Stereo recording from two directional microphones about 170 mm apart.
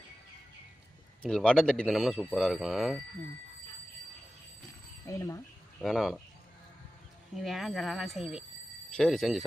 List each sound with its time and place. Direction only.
1.2 s speech: 5° left (ahead or behind)
5.0 s speech: 15° left (ahead or behind)
5.8 s speech: centre (ahead or behind)
7.3 s speech: centre (ahead or behind)